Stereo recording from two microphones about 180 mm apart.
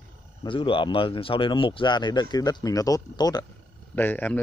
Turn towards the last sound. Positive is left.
turn(degrees=10)  # may be behind; listen again after turning